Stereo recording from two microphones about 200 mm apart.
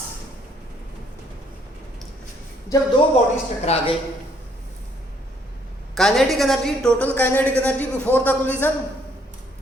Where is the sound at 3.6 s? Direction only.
30° left (ahead or behind).